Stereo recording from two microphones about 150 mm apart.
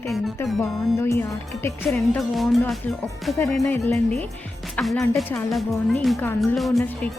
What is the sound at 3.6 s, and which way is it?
Speech, 15° left (ahead or behind).